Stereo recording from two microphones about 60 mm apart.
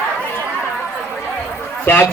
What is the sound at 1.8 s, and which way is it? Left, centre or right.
Speech, left.